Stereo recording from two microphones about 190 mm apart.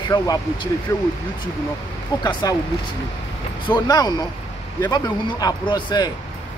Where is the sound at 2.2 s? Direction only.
20° left (ahead or behind).